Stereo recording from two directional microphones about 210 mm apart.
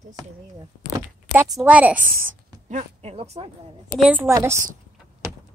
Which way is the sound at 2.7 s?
35° right (ahead or behind).